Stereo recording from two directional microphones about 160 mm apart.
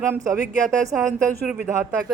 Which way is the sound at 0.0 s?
20° right (ahead or behind).